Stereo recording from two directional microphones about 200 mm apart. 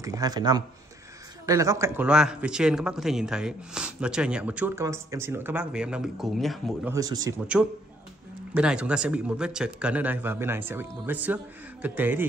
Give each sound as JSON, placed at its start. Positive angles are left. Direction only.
{"t": 0.0, "sound": "speech", "side_deg": -20}
{"t": 6.9, "sound": "speech", "side_deg": -20}
{"t": 8.5, "sound": "a man's voice", "side_deg": -5}